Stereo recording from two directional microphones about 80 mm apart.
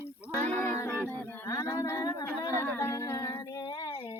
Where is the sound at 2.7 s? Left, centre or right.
Left.